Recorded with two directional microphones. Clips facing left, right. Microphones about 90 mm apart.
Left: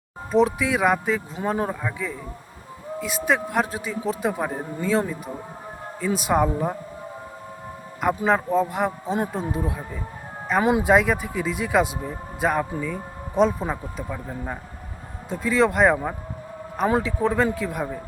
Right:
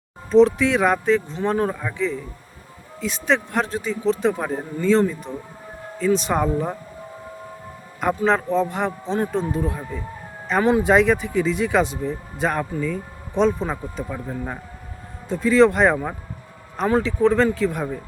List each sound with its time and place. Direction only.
0.3 s a man's voice: 5° left (ahead or behind)
8.0 s speech: 5° left (ahead or behind)